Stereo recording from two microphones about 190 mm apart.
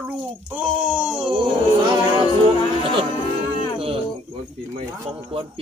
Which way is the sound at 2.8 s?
25° right (ahead or behind).